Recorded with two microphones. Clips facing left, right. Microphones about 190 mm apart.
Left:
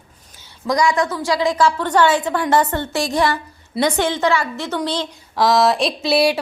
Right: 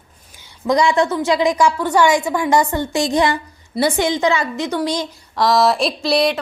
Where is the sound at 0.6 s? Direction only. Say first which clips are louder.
Right 2 dB; 25° right (ahead or behind).